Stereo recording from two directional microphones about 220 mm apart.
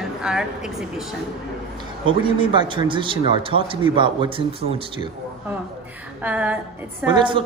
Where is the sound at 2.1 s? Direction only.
20° right (ahead or behind).